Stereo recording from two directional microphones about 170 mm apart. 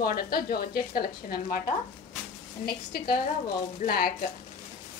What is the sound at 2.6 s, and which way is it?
A woman's voice, 65° left (ahead or behind).